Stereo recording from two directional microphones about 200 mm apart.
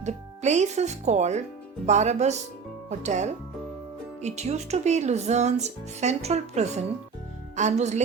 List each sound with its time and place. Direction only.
0.0 s speech: 35° right (ahead or behind)